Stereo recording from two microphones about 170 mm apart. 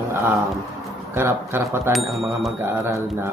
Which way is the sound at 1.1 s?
15° right (ahead or behind).